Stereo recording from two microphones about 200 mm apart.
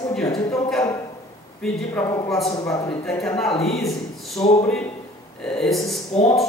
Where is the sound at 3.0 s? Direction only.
5° left (ahead or behind).